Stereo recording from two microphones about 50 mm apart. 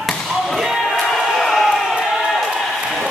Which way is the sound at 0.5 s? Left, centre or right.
Centre.